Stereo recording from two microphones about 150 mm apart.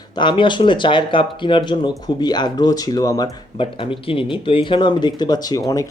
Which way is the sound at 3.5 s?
35° left (ahead or behind).